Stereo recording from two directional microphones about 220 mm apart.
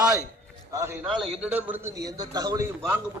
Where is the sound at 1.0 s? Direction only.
Centre (ahead or behind).